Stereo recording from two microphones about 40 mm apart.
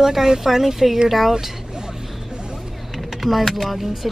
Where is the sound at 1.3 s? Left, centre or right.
Centre.